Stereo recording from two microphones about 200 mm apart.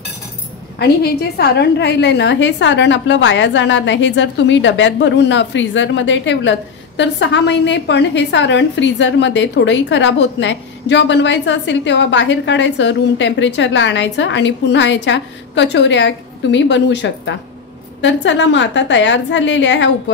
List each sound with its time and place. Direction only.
0.7 s a woman's voice: 55° left (ahead or behind)